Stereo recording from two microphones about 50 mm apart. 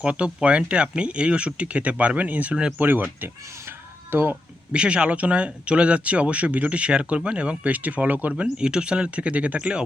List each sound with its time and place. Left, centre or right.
0.0 s speech: right
3.7 s a sound: right
4.7 s speech: right